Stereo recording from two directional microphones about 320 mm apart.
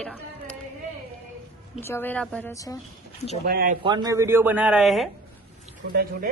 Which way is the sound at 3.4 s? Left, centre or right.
Right.